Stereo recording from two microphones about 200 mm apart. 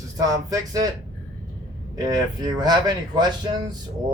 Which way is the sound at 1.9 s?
20° right (ahead or behind).